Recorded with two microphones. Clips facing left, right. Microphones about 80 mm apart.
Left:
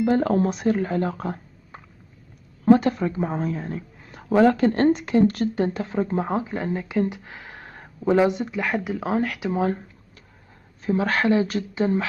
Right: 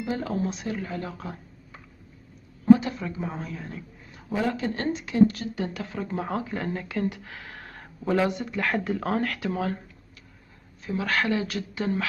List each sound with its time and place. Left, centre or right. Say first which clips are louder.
0.0 s speech: left 9 dB; left
3.1 s a woman's voice: left 8 dB; left
4.1 s speech: left 10 dB; left
5.7 s speech: left 7 dB; left
10.9 s speech: left 5 dB; left